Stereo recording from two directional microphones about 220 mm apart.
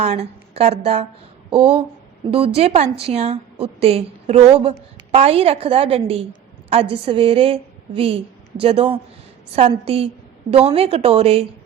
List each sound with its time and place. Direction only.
0.0 s a woman's voice: 30° right (ahead or behind)